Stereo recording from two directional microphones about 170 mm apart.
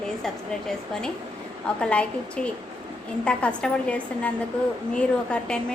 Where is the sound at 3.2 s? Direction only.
5° left (ahead or behind).